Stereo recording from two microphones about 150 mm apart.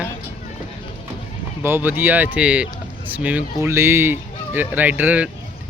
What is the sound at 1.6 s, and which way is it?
Speech, 15° right (ahead or behind).